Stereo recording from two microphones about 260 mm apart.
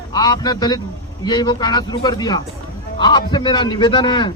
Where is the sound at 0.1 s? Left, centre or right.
Centre.